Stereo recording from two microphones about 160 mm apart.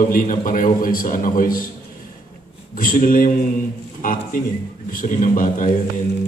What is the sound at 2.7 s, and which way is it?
A man's voice, 60° left (ahead or behind).